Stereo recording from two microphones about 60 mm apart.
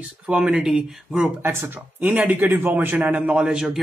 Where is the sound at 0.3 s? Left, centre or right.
Centre.